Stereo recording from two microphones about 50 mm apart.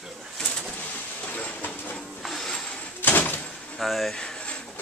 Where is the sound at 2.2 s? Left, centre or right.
Centre.